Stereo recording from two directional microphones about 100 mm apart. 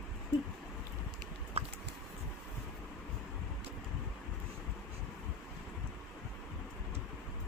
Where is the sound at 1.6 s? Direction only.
90° right.